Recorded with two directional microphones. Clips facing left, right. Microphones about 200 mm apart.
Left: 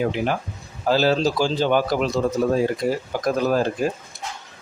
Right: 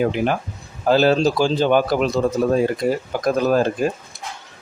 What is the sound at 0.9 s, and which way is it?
Speech, 55° right (ahead or behind).